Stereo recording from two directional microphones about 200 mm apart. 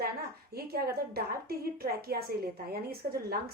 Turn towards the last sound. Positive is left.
turn(degrees=-50)  # may be behind; listen again after turning